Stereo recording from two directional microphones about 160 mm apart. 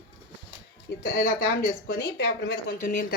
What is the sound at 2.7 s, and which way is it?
Speech, 55° left (ahead or behind).